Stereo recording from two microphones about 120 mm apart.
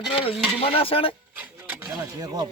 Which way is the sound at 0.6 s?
50° left (ahead or behind).